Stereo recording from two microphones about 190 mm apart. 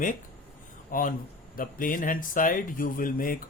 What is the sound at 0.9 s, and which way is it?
Speech, 45° left (ahead or behind).